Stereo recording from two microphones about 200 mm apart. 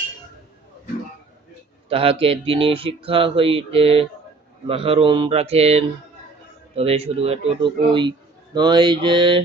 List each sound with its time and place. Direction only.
1.9 s speech: 30° right (ahead or behind)